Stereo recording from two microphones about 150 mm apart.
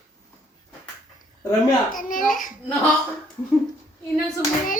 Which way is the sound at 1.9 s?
65° left (ahead or behind).